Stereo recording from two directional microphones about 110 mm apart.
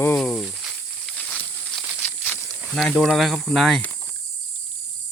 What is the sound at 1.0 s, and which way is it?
Snake, 5° left (ahead or behind).